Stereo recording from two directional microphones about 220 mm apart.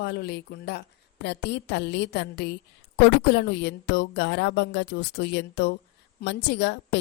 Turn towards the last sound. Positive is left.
turn(degrees=50)  # may be behind; listen again after turning